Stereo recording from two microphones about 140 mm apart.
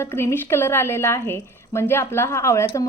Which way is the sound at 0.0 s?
20° left (ahead or behind).